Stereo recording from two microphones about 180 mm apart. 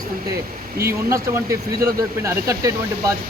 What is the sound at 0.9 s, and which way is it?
Speech, 15° right (ahead or behind).